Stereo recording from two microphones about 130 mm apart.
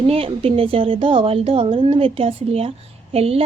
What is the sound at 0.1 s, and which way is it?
A woman's voice, 50° right (ahead or behind).